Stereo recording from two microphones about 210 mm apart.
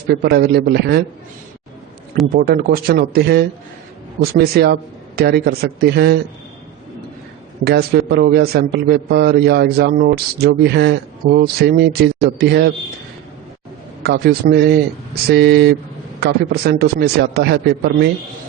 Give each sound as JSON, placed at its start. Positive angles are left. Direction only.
{"t": 0.1, "sound": "a man's voice", "side_deg": -50}
{"t": 2.3, "sound": "a man's voice", "side_deg": -45}
{"t": 7.6, "sound": "a man's voice", "side_deg": -50}
{"t": 14.0, "sound": "a man's voice", "side_deg": -45}